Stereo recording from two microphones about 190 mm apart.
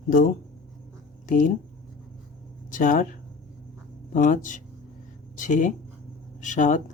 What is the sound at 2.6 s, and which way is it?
Speech, 45° left (ahead or behind).